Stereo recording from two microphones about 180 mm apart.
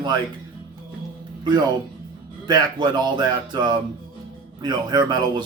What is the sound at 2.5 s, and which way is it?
Speech, 25° right (ahead or behind).